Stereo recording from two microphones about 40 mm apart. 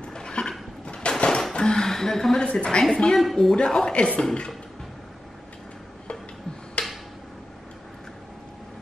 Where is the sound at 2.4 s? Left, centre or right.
Left.